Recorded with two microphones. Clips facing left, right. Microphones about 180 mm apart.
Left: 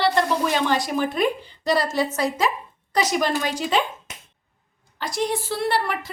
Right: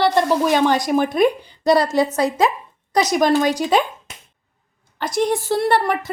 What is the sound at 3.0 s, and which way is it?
Speech, 45° right (ahead or behind).